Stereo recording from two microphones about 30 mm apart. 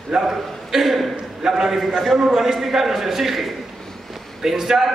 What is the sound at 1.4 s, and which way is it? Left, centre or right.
A man's voice, centre.